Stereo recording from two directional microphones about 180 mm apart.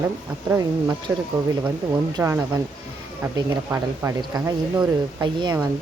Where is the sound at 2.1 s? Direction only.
15° right (ahead or behind).